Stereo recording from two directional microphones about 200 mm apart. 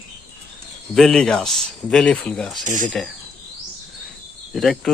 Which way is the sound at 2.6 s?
40° right (ahead or behind).